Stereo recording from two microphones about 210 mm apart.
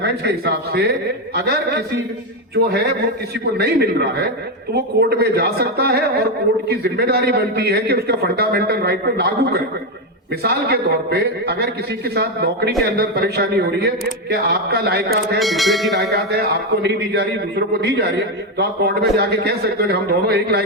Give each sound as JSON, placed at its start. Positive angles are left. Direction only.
{"t": 0.0, "sound": "a man's voice", "side_deg": -50}
{"t": 15.4, "sound": "speech", "side_deg": 0}
{"t": 16.1, "sound": "a man's voice", "side_deg": -50}